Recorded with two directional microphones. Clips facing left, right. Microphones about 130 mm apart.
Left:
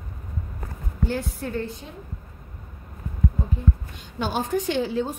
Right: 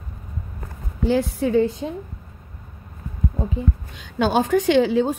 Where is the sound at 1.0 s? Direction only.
90° right.